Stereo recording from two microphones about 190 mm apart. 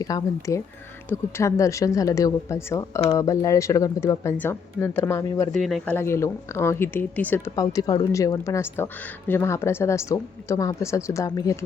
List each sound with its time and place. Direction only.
0.0 s speech: 20° left (ahead or behind)
5.5 s speech: centre (ahead or behind); by 11.5 s 20° left (ahead or behind)